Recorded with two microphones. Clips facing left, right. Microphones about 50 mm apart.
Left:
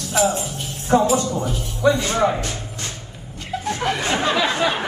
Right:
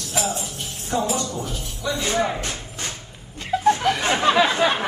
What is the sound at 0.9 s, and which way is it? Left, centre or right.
Speech, left.